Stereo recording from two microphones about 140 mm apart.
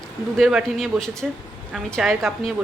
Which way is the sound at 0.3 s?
Centre (ahead or behind).